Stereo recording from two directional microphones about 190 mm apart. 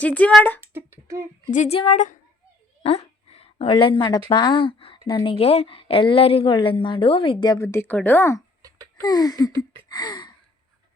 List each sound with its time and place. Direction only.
0.0 s speech: 10° left (ahead or behind)
0.6 s speech: 10° right (ahead or behind)
1.5 s a woman's voice: 40° left (ahead or behind); by 9.5 s 20° left (ahead or behind)
9.9 s a sound: 20° left (ahead or behind)